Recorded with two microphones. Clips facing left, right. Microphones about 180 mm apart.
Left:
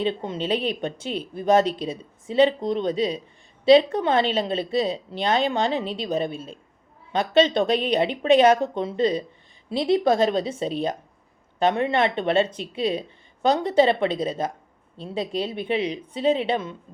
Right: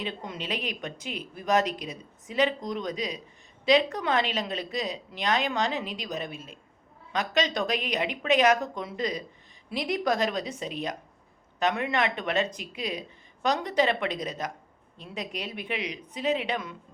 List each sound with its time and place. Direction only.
0.0 s a woman's voice: 30° left (ahead or behind)